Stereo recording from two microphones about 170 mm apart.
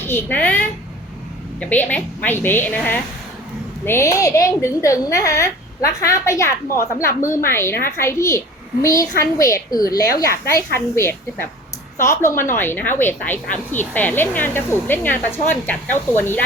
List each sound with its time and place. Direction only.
0.0 s a woman's voice: 15° left (ahead or behind)